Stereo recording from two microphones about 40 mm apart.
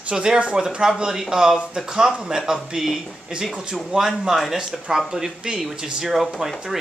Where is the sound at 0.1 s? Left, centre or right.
Centre.